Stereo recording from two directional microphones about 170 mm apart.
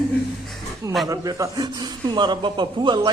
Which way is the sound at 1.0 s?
20° right (ahead or behind).